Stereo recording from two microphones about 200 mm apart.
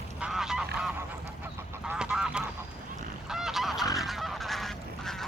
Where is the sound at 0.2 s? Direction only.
Centre (ahead or behind).